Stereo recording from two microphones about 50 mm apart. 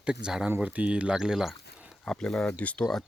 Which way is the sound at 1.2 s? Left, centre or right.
Centre.